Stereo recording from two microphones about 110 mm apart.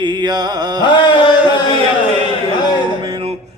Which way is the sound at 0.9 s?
45° left (ahead or behind).